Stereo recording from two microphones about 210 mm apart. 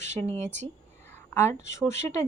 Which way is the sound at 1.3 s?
10° left (ahead or behind).